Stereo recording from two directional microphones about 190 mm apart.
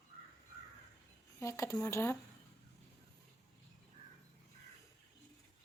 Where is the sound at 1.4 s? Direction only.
15° left (ahead or behind).